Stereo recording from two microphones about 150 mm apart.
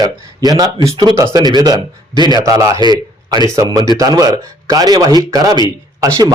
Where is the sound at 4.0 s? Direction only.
25° right (ahead or behind).